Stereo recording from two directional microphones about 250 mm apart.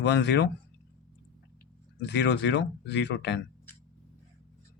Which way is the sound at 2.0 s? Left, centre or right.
Left.